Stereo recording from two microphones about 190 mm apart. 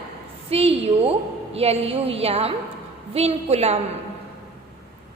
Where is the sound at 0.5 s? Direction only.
30° right (ahead or behind).